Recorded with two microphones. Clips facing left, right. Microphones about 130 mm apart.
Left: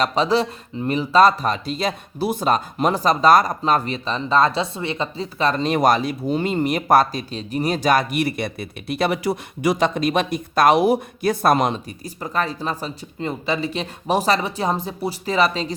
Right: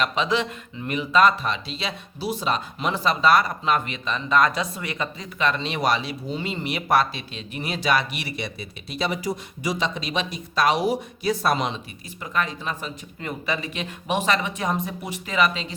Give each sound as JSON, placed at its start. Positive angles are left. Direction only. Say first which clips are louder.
{"t": 0.0, "sound": "speech", "louder": "left 5 dB", "side_deg": 35}
{"t": 12.2, "sound": "speech", "louder": "left 3 dB", "side_deg": 35}